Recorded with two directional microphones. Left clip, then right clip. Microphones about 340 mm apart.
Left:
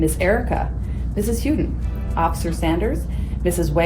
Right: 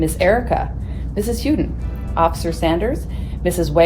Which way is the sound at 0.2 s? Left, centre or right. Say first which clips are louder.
Right 4 dB; right.